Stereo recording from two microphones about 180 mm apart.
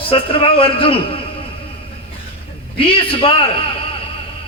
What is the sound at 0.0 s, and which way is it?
A man's voice, 30° left (ahead or behind).